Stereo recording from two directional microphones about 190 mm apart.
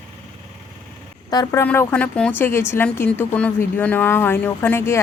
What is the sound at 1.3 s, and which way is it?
Speech, 20° left (ahead or behind).